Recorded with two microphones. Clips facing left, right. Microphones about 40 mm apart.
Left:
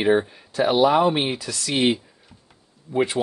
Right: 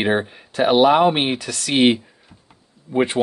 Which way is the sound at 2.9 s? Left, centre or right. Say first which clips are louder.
Right 3 dB; right.